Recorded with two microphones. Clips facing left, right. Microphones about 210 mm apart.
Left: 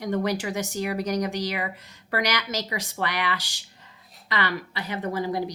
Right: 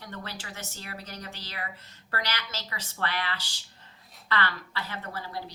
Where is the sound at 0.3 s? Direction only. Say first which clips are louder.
Left 14 dB; 15° left (ahead or behind).